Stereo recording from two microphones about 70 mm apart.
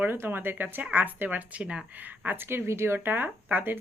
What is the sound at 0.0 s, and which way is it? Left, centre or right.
A woman's voice, right.